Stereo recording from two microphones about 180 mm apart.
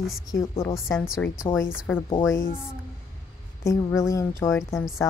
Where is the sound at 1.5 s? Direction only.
15° left (ahead or behind).